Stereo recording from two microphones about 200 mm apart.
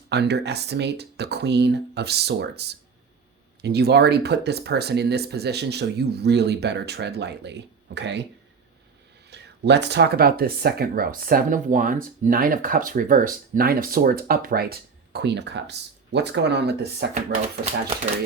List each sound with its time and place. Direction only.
0.1 s speech: 55° right (ahead or behind)
9.3 s speech: 60° right (ahead or behind)